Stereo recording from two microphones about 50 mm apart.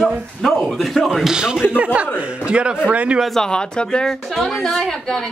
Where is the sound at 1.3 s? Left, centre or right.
Centre.